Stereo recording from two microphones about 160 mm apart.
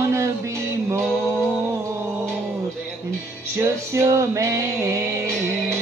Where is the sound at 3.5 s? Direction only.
15° right (ahead or behind).